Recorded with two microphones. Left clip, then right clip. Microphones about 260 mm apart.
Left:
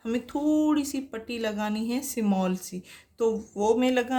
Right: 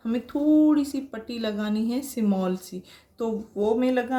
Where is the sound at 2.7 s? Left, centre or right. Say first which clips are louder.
Right 2 dB; left.